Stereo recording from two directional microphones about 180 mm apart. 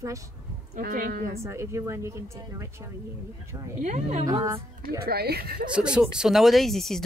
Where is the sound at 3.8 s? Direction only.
40° right (ahead or behind).